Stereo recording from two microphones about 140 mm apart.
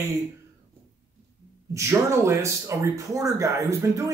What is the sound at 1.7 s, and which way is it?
Speech, 20° right (ahead or behind).